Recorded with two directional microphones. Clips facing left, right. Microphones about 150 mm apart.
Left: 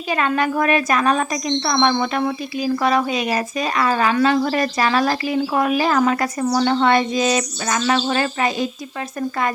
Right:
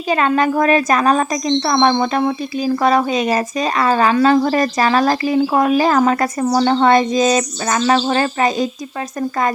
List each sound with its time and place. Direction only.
0.1 s a woman's voice: 35° right (ahead or behind)